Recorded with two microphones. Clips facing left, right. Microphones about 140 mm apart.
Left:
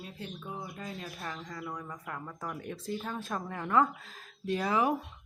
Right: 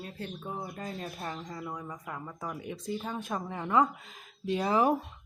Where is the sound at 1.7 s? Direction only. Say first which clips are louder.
Right 1 dB; 10° right (ahead or behind).